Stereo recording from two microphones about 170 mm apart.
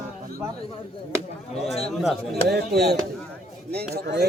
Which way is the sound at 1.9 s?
Centre (ahead or behind).